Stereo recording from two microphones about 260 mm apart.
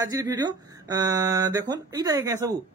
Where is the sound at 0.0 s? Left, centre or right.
Centre.